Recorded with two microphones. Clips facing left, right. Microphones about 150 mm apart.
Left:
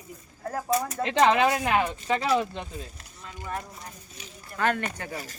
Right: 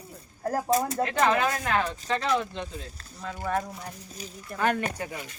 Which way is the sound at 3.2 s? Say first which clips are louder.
Right 6 dB; 90° right.